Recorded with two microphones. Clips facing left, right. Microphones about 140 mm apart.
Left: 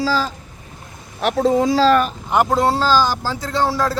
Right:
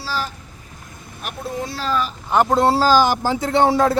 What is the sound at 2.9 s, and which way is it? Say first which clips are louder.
Speech: right 2 dB; 20° right (ahead or behind).